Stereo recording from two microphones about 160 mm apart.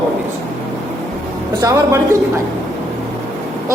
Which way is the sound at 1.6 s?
20° right (ahead or behind).